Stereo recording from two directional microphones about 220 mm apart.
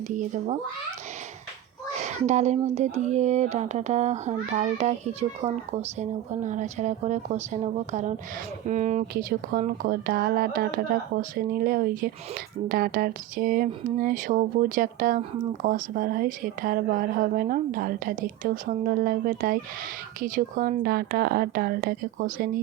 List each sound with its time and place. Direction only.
0.1 s speech: 35° right (ahead or behind)
2.0 s a woman's voice: 30° right (ahead or behind)